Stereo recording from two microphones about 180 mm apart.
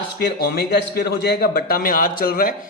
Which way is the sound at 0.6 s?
60° left (ahead or behind).